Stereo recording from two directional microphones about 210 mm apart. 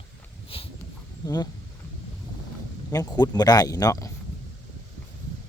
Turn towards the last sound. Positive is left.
turn(degrees=15)  # may be behind; listen again after turning